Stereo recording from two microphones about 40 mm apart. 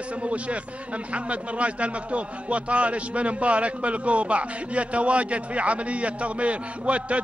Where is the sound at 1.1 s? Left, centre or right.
Right.